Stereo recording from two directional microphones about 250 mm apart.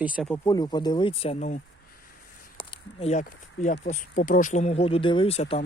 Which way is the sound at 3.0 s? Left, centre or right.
Left.